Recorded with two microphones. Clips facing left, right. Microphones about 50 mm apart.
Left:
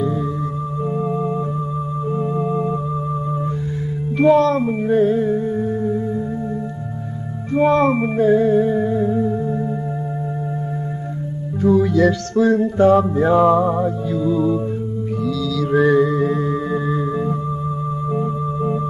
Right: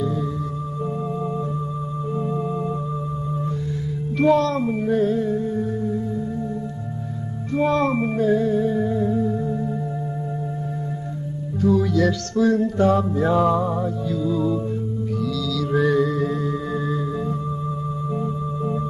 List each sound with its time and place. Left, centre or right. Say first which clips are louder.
2.1 s organ: left 4 dB; left
4.2 s music: left 4 dB; left
7.5 s music: left 5 dB; left
11.6 s music: left 4 dB; left
18.1 s organ: left 5 dB; left